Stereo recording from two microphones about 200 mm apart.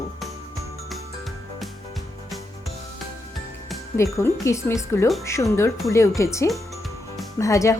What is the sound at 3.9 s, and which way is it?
Speech, 15° left (ahead or behind).